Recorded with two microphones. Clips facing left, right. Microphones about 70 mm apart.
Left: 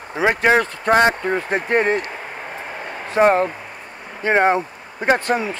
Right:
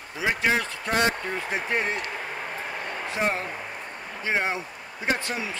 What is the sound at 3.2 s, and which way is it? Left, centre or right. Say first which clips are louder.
Speech: left 13 dB; left.